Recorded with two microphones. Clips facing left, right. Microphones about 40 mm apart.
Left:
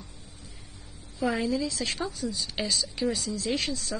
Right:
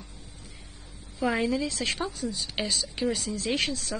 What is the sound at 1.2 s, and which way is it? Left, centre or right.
Speech, right.